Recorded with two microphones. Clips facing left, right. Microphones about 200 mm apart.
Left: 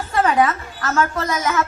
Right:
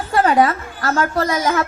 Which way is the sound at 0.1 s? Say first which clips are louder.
Right 3 dB; 35° right (ahead or behind).